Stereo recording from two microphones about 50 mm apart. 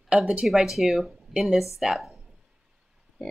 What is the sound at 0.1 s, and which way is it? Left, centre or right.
Speech, right.